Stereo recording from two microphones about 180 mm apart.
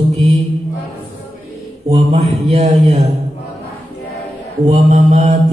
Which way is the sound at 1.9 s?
35° right (ahead or behind).